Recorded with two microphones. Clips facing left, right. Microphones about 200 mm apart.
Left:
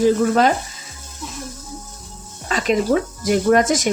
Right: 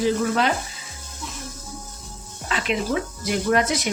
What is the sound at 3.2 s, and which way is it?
Speech, 45° left (ahead or behind).